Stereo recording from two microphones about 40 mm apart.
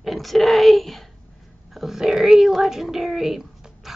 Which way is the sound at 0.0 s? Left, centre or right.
Centre.